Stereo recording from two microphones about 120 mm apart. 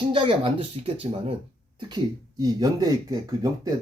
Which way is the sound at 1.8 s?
35° right (ahead or behind).